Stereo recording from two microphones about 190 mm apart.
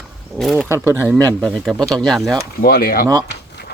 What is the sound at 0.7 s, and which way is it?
Speech, 10° right (ahead or behind).